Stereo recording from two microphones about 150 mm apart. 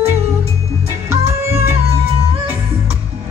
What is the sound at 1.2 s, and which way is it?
Music, 20° right (ahead or behind).